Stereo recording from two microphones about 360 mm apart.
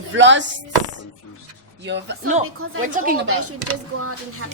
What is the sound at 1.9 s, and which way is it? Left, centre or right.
Speech, right.